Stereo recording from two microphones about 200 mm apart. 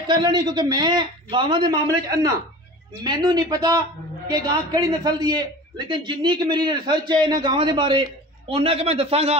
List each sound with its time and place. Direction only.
0.0 s a man's voice: 20° right (ahead or behind)